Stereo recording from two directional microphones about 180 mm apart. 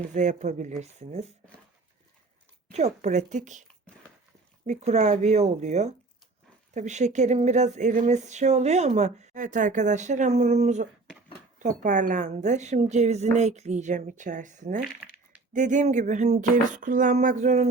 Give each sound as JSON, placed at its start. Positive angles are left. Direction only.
{"t": 0.1, "sound": "speech", "side_deg": -45}
{"t": 2.7, "sound": "speech", "side_deg": -40}